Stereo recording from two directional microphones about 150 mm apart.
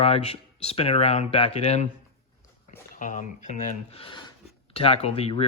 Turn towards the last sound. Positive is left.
turn(degrees=40)  # may be behind; listen again after turning